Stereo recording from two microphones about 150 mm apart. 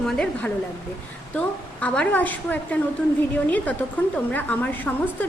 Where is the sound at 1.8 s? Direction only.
10° left (ahead or behind).